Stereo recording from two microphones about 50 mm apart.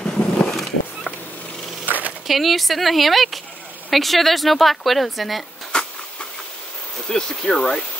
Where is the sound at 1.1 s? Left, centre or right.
Left.